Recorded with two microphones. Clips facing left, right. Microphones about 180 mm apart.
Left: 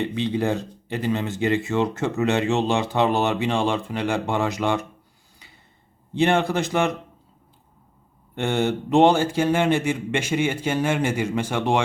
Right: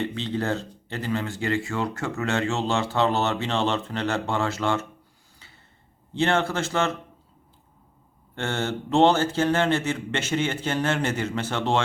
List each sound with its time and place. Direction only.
0.0 s speech: 15° left (ahead or behind)
6.1 s speech: 15° left (ahead or behind)
8.4 s speech: 15° left (ahead or behind)